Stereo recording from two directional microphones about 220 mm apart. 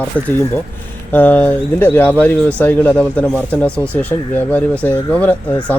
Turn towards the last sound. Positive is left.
turn(degrees=5)  # may be behind; listen again after turning